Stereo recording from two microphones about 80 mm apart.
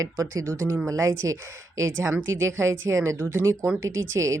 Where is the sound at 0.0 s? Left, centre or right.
Right.